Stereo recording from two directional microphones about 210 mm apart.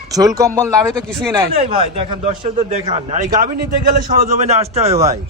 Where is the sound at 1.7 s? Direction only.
30° right (ahead or behind).